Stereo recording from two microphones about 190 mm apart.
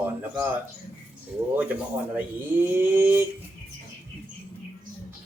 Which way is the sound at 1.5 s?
10° right (ahead or behind).